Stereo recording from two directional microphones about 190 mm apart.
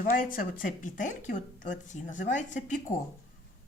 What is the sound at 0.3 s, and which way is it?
Speech, 45° left (ahead or behind).